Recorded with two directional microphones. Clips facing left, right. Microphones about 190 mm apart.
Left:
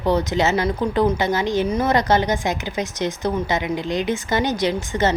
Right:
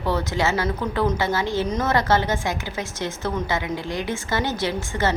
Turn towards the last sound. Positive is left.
turn(degrees=20)  # may be behind; listen again after turning